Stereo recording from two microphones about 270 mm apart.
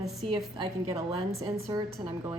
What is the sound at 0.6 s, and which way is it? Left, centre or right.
A woman's voice, centre.